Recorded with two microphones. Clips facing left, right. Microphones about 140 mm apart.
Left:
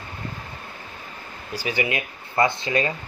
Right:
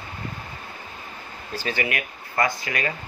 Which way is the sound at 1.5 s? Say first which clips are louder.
Left 2 dB; 15° left (ahead or behind).